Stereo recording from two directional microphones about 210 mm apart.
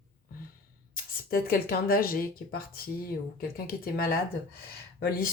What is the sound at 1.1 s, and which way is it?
Speech, 45° left (ahead or behind).